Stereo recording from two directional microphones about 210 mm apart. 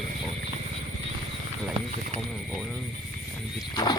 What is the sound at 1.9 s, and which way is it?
Speech, 35° right (ahead or behind).